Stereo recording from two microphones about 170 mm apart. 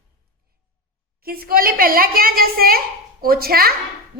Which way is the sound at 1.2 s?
60° right (ahead or behind).